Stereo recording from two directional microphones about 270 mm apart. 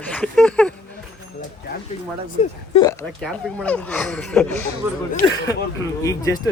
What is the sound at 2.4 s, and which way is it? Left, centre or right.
Speech, centre.